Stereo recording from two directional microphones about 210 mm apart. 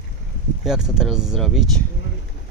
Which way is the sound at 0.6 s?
Centre (ahead or behind).